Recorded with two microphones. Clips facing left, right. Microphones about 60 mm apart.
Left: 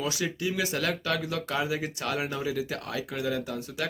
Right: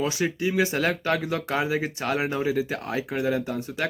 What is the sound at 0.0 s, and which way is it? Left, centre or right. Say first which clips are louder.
Speech: right 5 dB; right.